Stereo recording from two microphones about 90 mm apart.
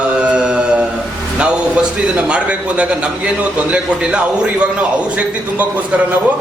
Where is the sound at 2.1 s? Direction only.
15° right (ahead or behind).